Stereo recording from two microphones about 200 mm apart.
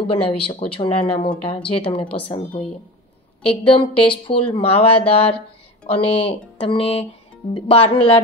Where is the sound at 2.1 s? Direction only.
25° left (ahead or behind).